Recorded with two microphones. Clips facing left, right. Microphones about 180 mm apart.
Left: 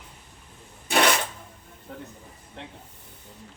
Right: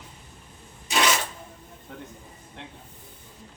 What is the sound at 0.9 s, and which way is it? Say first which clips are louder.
Filing: left 2 dB; 55° left (ahead or behind).